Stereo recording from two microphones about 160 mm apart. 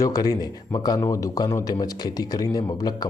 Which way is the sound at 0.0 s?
25° left (ahead or behind).